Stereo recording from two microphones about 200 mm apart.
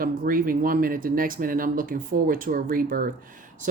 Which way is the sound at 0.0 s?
45° right (ahead or behind).